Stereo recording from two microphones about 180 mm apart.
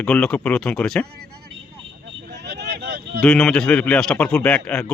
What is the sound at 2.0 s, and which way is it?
Vehicle, 75° right (ahead or behind).